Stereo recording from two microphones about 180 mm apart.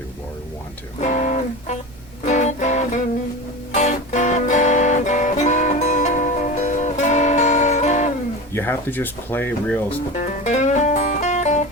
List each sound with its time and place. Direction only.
1.0 s guitar: 40° left (ahead or behind)
2.2 s music: 40° left (ahead or behind)
8.5 s speech: 10° left (ahead or behind)
10.2 s music: 40° left (ahead or behind)